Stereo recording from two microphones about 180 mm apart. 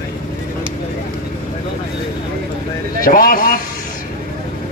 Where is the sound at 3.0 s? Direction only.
55° left (ahead or behind).